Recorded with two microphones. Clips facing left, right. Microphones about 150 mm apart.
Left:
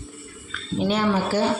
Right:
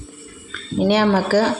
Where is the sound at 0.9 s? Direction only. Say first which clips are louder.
Right 6 dB; 80° right.